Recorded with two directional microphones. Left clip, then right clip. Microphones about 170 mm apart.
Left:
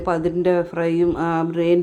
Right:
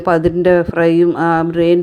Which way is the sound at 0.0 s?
25° right (ahead or behind).